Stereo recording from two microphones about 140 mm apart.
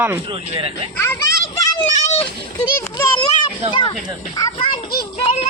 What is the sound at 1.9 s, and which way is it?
Children playing, 55° left (ahead or behind).